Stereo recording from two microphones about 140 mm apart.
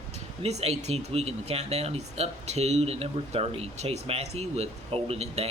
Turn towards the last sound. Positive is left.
turn(degrees=-50)  # may be behind; listen again after turning